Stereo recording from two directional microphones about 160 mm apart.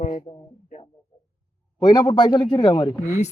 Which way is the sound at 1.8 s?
25° left (ahead or behind).